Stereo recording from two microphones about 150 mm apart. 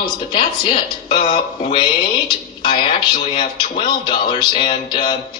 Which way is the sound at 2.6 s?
30° left (ahead or behind).